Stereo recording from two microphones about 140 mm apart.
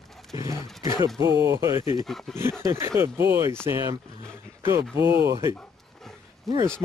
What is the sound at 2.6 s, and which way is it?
Speech, 20° right (ahead or behind).